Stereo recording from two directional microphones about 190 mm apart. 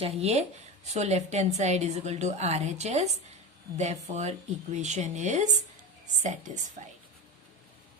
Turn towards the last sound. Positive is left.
turn(degrees=-40)  # may be behind; listen again after turning